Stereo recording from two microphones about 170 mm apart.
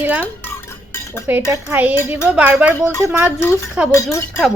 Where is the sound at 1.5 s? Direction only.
15° right (ahead or behind).